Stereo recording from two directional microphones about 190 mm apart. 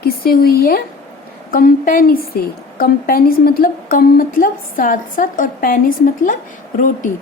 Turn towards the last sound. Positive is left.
turn(degrees=45)  # may be behind; listen again after turning